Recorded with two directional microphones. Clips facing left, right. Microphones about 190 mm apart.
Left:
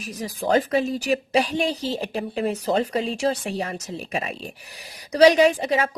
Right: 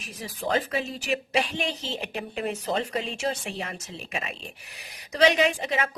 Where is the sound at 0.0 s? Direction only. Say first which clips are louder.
Left 5 dB; 40° left (ahead or behind).